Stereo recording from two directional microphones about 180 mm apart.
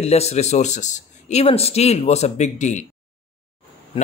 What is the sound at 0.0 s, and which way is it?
Speech, 35° left (ahead or behind).